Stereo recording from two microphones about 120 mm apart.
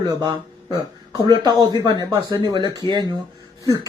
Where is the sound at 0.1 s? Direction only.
30° right (ahead or behind).